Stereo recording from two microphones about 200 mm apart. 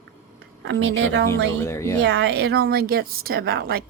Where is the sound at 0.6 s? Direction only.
65° right (ahead or behind).